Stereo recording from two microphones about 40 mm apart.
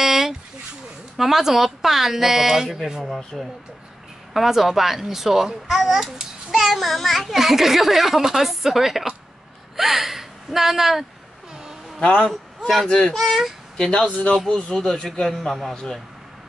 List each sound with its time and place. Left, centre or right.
0.0 s dog: centre
1.1 s a child's voice: centre
3.3 s a child's voice: centre
12.3 s a man's voice: centre
12.8 s speech: centre
13.2 s a child's voice: centre
13.7 s speech: centre
15.0 s a child's voice: centre